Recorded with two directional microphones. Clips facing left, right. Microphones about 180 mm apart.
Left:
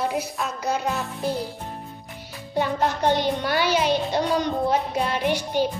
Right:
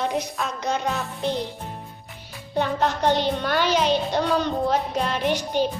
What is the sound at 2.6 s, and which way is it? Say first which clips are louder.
Music: even; 10° left (ahead or behind).